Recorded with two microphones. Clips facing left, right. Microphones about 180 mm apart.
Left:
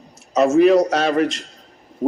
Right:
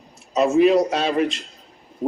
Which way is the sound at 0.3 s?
45° left (ahead or behind).